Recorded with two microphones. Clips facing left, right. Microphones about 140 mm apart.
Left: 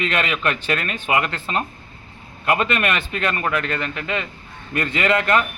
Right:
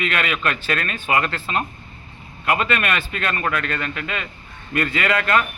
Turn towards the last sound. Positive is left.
turn(degrees=25)  # may be behind; listen again after turning